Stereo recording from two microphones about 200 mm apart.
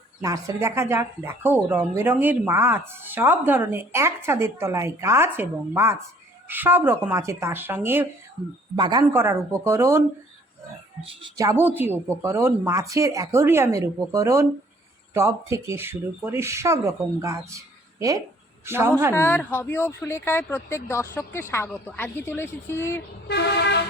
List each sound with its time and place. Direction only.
0.2 s speech: 15° right (ahead or behind)
8.7 s speech: 20° right (ahead or behind)
11.0 s speech: 20° right (ahead or behind)
18.6 s speech: 10° right (ahead or behind)
19.1 s speech: 10° left (ahead or behind)
23.3 s vehicle: 60° left (ahead or behind)